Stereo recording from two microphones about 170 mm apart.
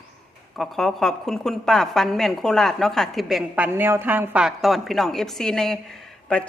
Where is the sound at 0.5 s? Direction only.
Centre (ahead or behind).